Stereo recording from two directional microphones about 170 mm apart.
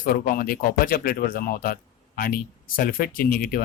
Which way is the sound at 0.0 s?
55° left (ahead or behind).